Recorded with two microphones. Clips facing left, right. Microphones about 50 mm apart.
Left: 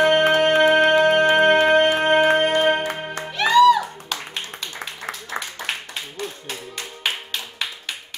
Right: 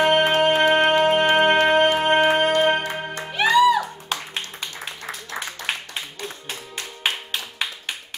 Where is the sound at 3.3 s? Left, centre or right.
Centre.